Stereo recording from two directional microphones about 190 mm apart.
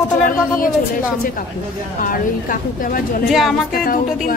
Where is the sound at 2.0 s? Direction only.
45° left (ahead or behind).